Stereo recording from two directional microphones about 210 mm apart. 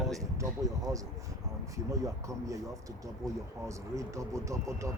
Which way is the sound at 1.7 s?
15° right (ahead or behind).